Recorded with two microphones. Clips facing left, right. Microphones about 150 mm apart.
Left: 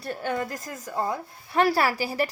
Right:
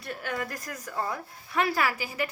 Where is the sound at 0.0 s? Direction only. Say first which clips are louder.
Left 5 dB; 30° left (ahead or behind).